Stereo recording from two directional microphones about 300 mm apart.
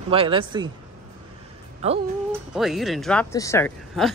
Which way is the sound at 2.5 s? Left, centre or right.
Centre.